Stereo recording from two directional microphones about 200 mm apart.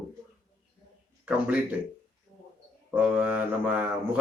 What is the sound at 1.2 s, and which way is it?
Speech, 5° right (ahead or behind).